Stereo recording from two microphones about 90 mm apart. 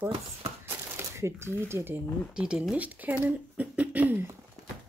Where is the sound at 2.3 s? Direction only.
10° right (ahead or behind).